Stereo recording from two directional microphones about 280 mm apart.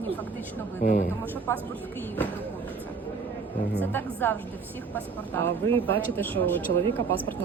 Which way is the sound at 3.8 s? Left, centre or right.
Centre.